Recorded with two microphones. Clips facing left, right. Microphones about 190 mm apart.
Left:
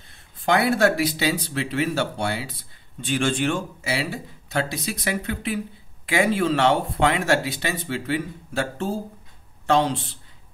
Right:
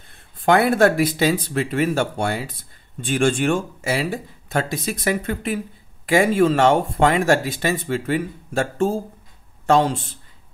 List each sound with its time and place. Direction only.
0.1 s speech: 55° right (ahead or behind)